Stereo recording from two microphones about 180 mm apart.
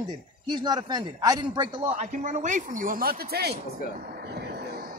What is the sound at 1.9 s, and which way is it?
Speech, 40° right (ahead or behind).